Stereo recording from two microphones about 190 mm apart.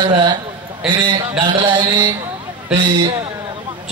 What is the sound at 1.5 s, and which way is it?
A man's voice, 25° right (ahead or behind).